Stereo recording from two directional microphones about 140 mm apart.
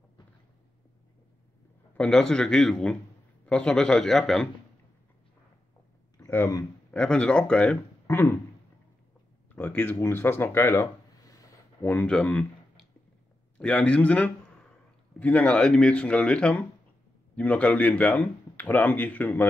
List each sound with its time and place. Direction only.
2.0 s a man's voice: 5° left (ahead or behind)
6.1 s speech: 20° left (ahead or behind)
6.9 s speech: 10° left (ahead or behind)
9.5 s speech: 15° left (ahead or behind)
11.9 s speech: 10° left (ahead or behind)